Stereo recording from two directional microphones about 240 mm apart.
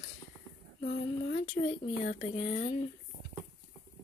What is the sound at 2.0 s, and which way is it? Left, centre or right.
Speech, left.